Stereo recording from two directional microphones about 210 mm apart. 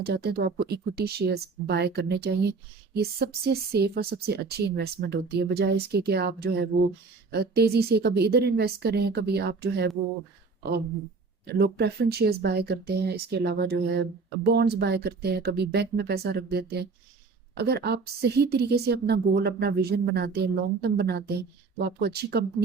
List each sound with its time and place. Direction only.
0.0 s speech: 50° right (ahead or behind)